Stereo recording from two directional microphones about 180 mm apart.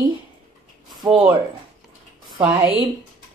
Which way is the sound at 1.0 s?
25° right (ahead or behind).